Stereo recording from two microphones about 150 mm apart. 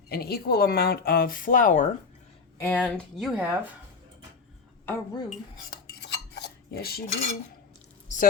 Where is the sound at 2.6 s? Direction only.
10° left (ahead or behind).